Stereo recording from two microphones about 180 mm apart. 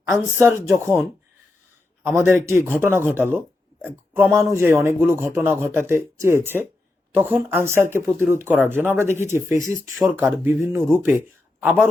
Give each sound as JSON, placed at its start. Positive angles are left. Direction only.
{"t": 0.0, "sound": "speech", "side_deg": -15}
{"t": 2.0, "sound": "speech", "side_deg": -15}
{"t": 9.9, "sound": "speech", "side_deg": 0}